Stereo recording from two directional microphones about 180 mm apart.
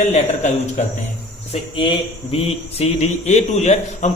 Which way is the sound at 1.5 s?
30° left (ahead or behind).